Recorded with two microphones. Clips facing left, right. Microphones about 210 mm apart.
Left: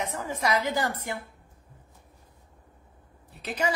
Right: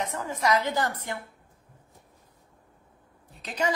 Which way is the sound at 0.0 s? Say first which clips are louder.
Right 1 dB; 10° left (ahead or behind).